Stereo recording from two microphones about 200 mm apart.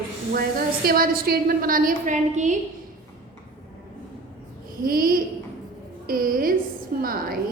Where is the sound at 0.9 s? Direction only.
45° right (ahead or behind).